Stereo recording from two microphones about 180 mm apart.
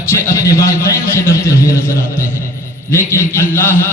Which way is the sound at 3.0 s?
10° left (ahead or behind).